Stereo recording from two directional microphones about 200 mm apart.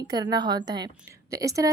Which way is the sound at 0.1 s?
20° right (ahead or behind).